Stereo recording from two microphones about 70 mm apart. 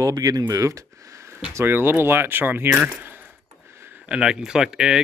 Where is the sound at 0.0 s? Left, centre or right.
Right.